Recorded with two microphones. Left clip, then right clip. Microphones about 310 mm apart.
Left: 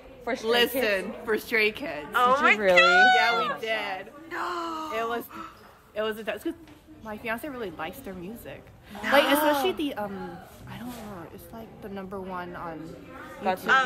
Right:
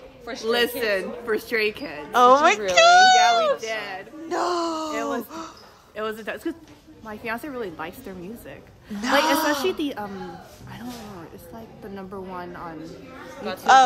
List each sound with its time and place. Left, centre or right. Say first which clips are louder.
0.2 s a man's voice: left 2 dB; centre
0.5 s a woman's voice: right 2 dB; centre
2.1 s a woman's voice: right 6 dB; centre
11.9 s a woman's voice: right 1 dB; centre
13.4 s a woman's voice: left 5 dB; centre